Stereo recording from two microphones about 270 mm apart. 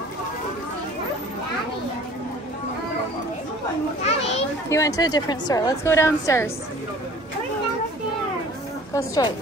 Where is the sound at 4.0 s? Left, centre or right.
Left.